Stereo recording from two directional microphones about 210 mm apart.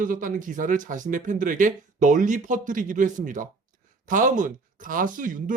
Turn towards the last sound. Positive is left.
turn(degrees=-40)  # may be behind; listen again after turning